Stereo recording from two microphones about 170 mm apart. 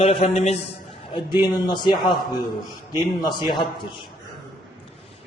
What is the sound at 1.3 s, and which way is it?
Speech, 25° left (ahead or behind).